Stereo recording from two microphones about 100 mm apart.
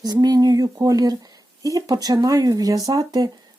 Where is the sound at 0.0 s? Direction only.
40° right (ahead or behind).